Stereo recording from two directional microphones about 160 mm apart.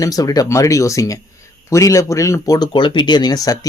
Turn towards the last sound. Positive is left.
turn(degrees=20)  # may be behind; listen again after turning